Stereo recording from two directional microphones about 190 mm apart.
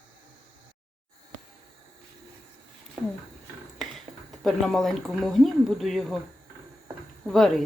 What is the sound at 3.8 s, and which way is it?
Speech, centre (ahead or behind).